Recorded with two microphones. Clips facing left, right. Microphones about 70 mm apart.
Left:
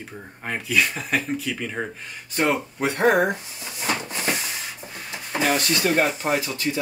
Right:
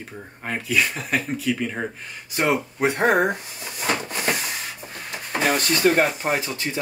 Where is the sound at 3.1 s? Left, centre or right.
Right.